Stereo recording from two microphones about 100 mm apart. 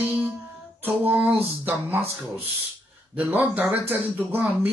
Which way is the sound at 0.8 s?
20° right (ahead or behind).